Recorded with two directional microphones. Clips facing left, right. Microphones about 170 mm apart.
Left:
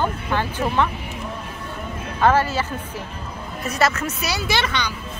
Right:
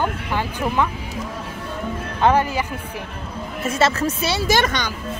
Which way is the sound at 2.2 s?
15° right (ahead or behind).